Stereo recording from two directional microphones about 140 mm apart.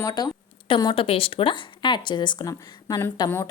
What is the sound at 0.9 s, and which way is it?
A woman's voice, 40° left (ahead or behind).